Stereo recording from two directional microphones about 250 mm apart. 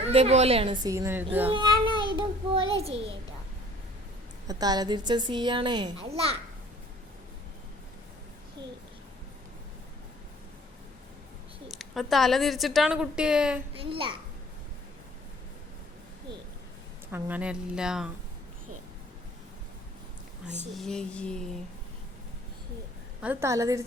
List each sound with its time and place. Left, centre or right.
0.0 s a child's voice: right; by 1.5 s centre
1.5 s child singing: centre
4.4 s a woman's voice: centre
11.7 s a woman's voice: centre
13.7 s a child's voice: right
17.1 s a woman's voice: centre
20.6 s a woman's voice: centre
23.2 s a woman's voice: centre